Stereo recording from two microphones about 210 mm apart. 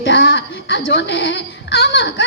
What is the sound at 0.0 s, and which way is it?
A woman's voice, 55° left (ahead or behind).